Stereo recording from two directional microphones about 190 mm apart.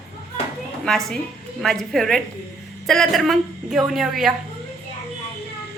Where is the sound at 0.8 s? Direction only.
Centre (ahead or behind).